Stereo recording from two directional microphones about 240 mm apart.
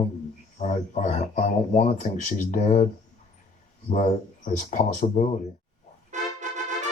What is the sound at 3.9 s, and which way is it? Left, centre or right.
Speech, left.